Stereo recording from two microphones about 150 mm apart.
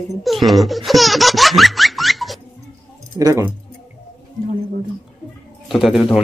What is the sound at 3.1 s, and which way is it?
Speech, 25° right (ahead or behind).